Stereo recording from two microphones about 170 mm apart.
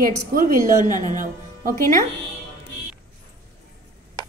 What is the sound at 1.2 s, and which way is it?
Speech, 55° right (ahead or behind).